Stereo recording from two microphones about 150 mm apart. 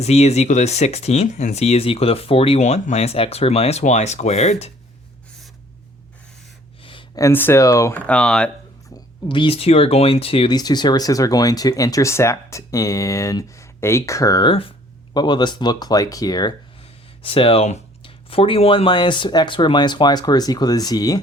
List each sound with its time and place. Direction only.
0.0 s speech: 45° left (ahead or behind)
7.2 s speech: 15° left (ahead or behind)
8.0 s speech: 5° left (ahead or behind)
9.3 s speech: 35° left (ahead or behind)
17.2 s speech: 40° left (ahead or behind)